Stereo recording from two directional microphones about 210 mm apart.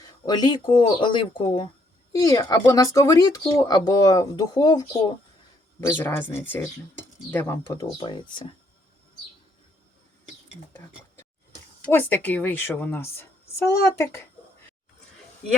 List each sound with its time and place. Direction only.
0.0 s speech: 20° left (ahead or behind)
11.9 s speech: 10° left (ahead or behind)